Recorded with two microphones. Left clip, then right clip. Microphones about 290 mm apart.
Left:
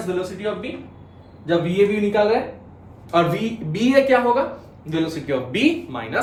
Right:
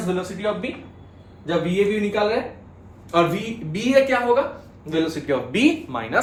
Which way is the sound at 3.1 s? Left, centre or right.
Centre.